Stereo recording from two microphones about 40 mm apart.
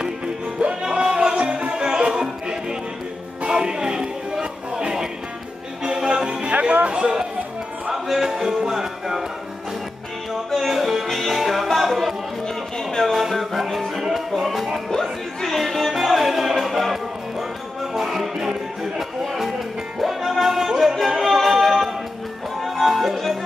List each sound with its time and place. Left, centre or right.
0.6 s music: right
6.4 s music: right
7.9 s music: centre
10.5 s music: centre
12.4 s music: centre
13.1 s music: centre